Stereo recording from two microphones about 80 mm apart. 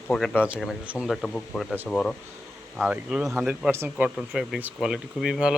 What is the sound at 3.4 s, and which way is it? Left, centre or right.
Speech, right.